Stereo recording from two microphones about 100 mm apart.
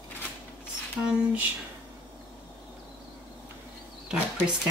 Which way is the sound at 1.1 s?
15° right (ahead or behind).